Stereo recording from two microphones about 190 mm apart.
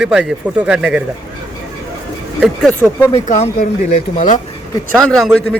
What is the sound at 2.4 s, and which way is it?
Speech, 5° right (ahead or behind).